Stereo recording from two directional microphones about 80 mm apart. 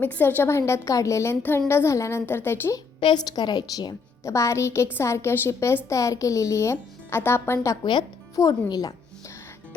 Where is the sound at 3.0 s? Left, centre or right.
Left.